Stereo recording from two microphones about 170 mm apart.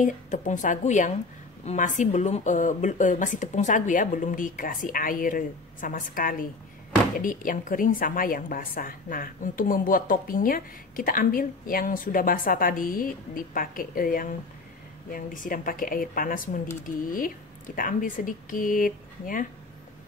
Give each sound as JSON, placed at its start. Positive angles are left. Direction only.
{"t": 0.0, "sound": "a woman's voice", "side_deg": 50}